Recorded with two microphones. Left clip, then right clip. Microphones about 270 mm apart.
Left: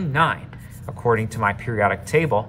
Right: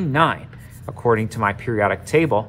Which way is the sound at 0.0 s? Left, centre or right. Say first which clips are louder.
Right 2 dB; centre.